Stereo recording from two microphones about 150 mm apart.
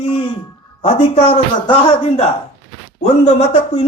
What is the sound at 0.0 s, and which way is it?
Speech, 35° left (ahead or behind).